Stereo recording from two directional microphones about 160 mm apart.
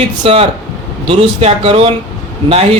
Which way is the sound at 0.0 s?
40° right (ahead or behind).